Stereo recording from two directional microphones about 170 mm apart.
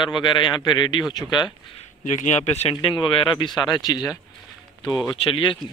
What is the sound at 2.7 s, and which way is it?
Speech, 25° left (ahead or behind).